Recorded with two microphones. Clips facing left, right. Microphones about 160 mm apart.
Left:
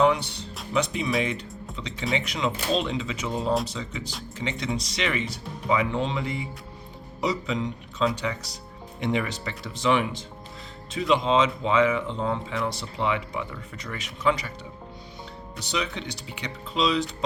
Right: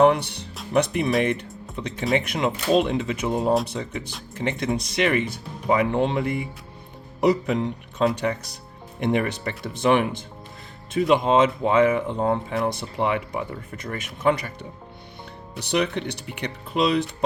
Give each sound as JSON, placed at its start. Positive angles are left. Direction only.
{"t": 0.0, "sound": "music", "side_deg": -60}
{"t": 0.7, "sound": "speech", "side_deg": -60}